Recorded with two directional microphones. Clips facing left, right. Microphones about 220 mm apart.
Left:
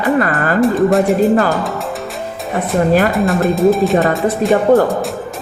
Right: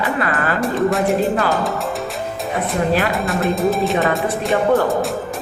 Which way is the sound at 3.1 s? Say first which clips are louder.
Left 5 dB; centre (ahead or behind).